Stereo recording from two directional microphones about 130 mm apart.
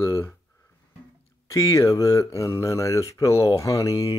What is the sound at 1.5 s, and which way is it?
Speech, 25° left (ahead or behind).